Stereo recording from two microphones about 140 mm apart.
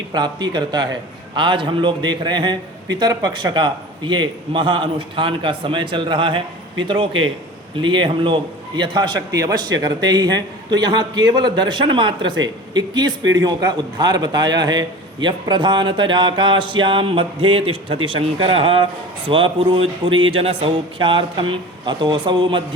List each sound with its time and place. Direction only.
0.1 s a man's voice: 30° right (ahead or behind)